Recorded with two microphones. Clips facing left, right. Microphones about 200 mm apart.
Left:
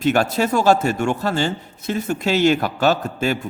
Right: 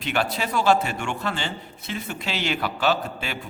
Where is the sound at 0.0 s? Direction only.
45° left (ahead or behind).